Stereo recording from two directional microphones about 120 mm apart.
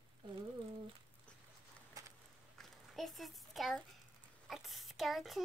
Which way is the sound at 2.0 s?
30° right (ahead or behind).